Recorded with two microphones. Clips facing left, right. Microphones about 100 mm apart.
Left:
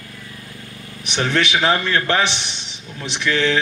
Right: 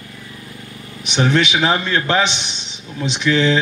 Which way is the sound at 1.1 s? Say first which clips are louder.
Right 3 dB; 20° right (ahead or behind).